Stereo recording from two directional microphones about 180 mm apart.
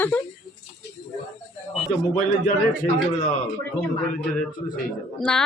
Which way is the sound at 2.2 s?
45° left (ahead or behind).